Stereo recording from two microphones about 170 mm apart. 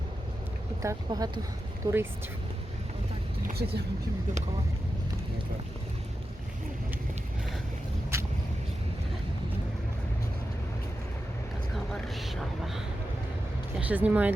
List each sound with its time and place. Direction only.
0.8 s speech: 20° right (ahead or behind)
3.4 s speech: 65° right (ahead or behind)
8.1 s vehicle: 15° right (ahead or behind)
11.9 s a sound: centre (ahead or behind)
13.7 s speech: 10° right (ahead or behind)